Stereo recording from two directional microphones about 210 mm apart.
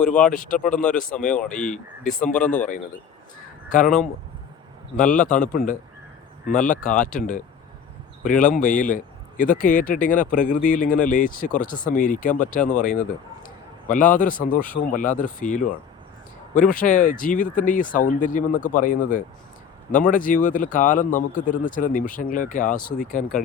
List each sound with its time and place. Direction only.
0.0 s speech: 5° left (ahead or behind)
0.3 s speech: 40° left (ahead or behind)
1.6 s speech: 5° left (ahead or behind)
3.7 s speech: 40° left (ahead or behind)
4.9 s speech: 40° left (ahead or behind)